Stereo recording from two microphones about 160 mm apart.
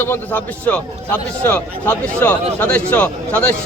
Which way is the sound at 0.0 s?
10° left (ahead or behind).